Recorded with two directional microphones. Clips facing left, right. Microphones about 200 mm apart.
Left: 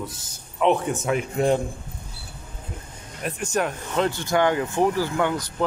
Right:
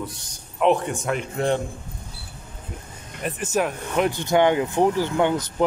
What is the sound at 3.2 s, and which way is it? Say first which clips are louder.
Speech: right 1 dB; 5° right (ahead or behind).